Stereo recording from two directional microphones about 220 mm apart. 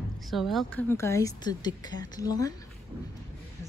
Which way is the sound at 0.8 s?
10° left (ahead or behind).